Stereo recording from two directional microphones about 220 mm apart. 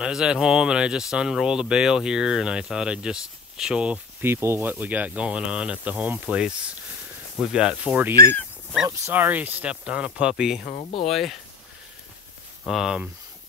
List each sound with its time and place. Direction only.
0.0 s speech: 5° right (ahead or behind)
10.6 s speech: 30° left (ahead or behind)
11.1 s speech: centre (ahead or behind)
12.6 s speech: centre (ahead or behind)